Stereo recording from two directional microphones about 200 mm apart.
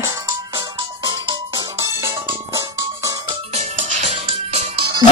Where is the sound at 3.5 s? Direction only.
35° right (ahead or behind).